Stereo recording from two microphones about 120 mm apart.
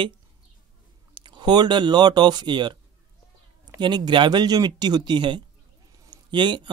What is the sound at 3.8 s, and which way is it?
Speech, 40° right (ahead or behind).